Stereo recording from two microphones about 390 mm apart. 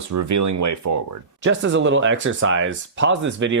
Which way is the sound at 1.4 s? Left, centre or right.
Right.